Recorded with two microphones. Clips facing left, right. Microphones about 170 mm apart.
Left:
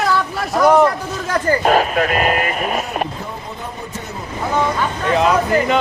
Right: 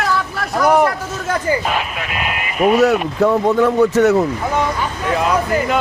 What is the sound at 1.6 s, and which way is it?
Speech, 40° left (ahead or behind).